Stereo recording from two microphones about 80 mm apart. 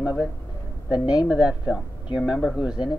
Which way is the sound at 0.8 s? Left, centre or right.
Left.